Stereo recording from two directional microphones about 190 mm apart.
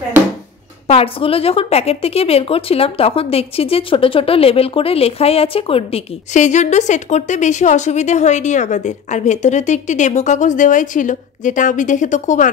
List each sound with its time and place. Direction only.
0.8 s a woman's voice: 30° left (ahead or behind)